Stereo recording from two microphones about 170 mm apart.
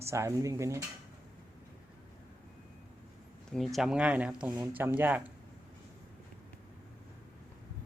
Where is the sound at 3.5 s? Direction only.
Centre (ahead or behind).